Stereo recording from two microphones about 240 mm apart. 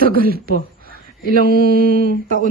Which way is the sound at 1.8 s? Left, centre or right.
Right.